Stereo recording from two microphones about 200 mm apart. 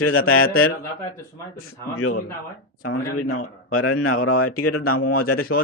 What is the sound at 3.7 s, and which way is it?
Speech, 90° left.